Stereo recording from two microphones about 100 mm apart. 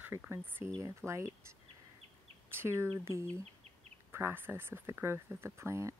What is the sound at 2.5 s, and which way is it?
Speech, 25° right (ahead or behind).